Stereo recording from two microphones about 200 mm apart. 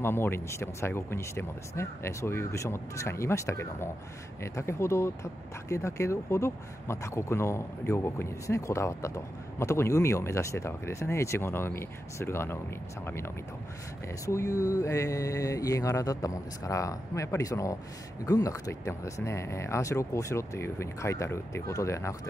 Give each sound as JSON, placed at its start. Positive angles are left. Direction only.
{"t": 0.0, "sound": "speech", "side_deg": 10}